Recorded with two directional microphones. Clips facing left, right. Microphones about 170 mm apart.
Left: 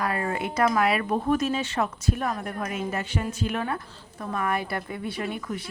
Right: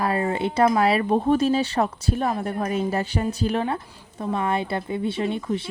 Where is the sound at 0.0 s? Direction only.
25° right (ahead or behind).